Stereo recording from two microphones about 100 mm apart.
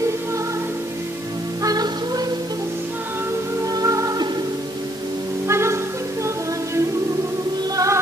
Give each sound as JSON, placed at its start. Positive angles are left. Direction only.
{"t": 1.6, "sound": "music", "side_deg": -40}
{"t": 3.7, "sound": "music", "side_deg": -35}
{"t": 5.5, "sound": "music", "side_deg": -25}
{"t": 7.7, "sound": "music", "side_deg": -35}